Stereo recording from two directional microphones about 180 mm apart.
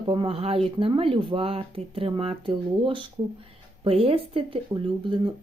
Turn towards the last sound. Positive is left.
turn(degrees=-30)  # may be behind; listen again after turning